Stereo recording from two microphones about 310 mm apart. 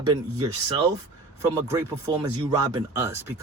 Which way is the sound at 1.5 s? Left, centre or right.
Centre.